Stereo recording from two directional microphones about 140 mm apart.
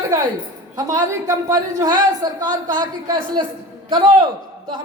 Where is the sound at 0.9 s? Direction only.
25° right (ahead or behind).